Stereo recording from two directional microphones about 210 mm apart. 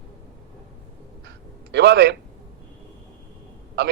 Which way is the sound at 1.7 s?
55° right (ahead or behind).